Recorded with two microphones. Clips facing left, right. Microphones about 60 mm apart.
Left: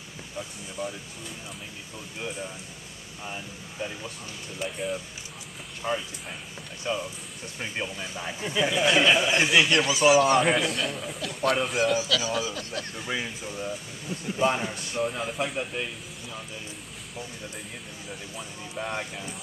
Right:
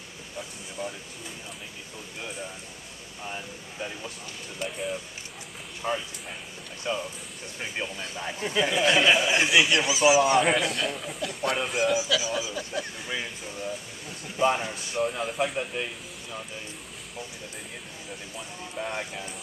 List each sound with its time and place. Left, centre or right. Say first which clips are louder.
3.3 s a man's voice: right 1 dB; centre
10.4 s a man's voice: even; centre
12.0 s speech: even; centre
13.0 s a man's voice: left 2 dB; centre
18.8 s a man's voice: even; centre